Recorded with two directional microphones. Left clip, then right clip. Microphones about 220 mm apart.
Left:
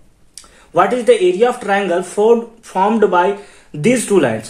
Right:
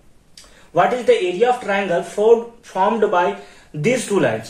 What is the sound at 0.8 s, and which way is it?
Speech, 50° left (ahead or behind).